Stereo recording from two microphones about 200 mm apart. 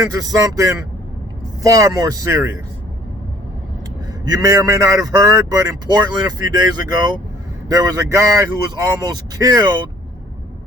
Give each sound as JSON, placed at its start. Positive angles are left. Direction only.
{"t": 0.2, "sound": "speech", "side_deg": -15}
{"t": 4.4, "sound": "speech", "side_deg": -15}